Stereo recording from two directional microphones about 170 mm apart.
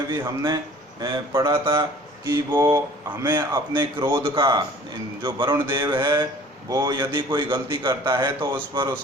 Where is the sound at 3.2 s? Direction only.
25° right (ahead or behind).